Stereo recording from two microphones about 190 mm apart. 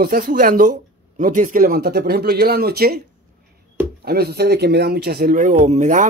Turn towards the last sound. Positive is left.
turn(degrees=-40)  # may be behind; listen again after turning